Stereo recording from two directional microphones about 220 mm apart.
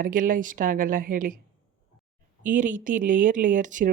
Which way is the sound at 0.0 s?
40° right (ahead or behind).